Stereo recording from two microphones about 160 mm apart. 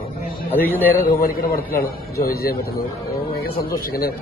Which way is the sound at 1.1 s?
65° left (ahead or behind).